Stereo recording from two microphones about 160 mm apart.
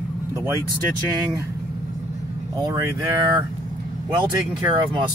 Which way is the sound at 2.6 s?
25° right (ahead or behind).